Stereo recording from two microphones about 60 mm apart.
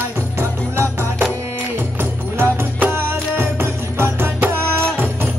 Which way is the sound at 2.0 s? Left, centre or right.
Right.